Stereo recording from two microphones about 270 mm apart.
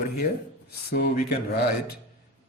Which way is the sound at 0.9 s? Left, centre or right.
Left.